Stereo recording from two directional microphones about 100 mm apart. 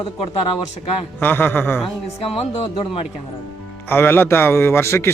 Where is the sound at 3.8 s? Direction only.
20° left (ahead or behind).